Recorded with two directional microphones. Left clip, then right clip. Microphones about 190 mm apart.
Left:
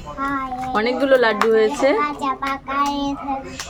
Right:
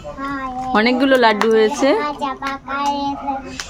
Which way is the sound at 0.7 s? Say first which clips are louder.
Right 2 dB; 60° right (ahead or behind).